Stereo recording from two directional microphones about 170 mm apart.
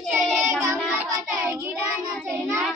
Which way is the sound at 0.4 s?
15° right (ahead or behind).